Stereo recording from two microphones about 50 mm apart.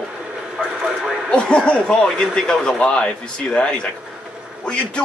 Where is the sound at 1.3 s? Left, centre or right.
Centre.